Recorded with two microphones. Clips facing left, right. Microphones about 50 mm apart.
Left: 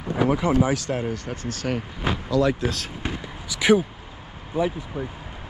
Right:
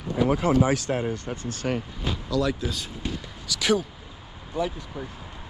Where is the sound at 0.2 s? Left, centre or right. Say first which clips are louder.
Left 1 dB; left.